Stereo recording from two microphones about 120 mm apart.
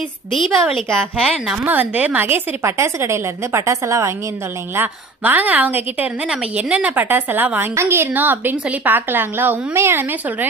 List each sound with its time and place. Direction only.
0.3 s a woman's voice: centre (ahead or behind)
1.6 s a woman's voice: 15° right (ahead or behind)